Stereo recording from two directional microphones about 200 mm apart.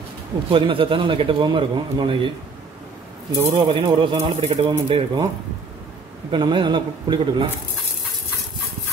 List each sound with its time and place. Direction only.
0.5 s a man's voice: 25° right (ahead or behind)
3.5 s a man's voice: 25° right (ahead or behind)
6.3 s a man's voice: 25° right (ahead or behind)